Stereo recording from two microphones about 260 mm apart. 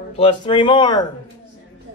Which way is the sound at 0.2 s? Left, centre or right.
Centre.